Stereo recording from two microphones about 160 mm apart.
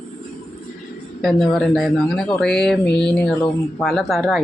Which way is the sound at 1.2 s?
Centre (ahead or behind).